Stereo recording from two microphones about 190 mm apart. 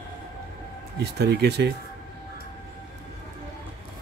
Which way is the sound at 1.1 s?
60° right (ahead or behind).